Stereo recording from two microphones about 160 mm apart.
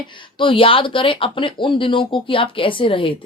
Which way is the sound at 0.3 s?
35° left (ahead or behind).